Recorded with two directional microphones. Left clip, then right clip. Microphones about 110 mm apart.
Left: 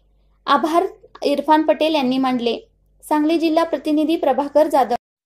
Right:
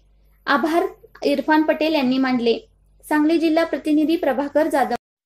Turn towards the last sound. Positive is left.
turn(degrees=35)  # may be behind; listen again after turning